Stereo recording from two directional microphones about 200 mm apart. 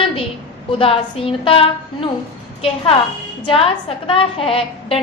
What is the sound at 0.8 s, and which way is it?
A woman's voice, 25° left (ahead or behind).